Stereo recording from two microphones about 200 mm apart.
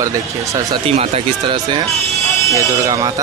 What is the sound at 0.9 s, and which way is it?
Speech, 25° right (ahead or behind).